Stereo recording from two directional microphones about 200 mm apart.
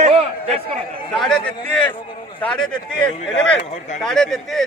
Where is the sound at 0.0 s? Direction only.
30° right (ahead or behind).